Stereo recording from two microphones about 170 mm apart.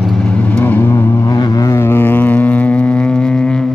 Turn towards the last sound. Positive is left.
turn(degrees=5)  # may be behind; listen again after turning